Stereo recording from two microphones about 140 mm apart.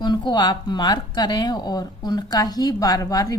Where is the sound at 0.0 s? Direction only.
30° left (ahead or behind).